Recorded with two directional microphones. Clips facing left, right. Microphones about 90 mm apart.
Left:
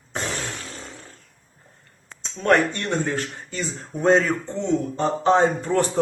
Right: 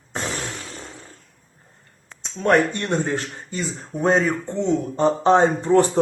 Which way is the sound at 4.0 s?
5° right (ahead or behind).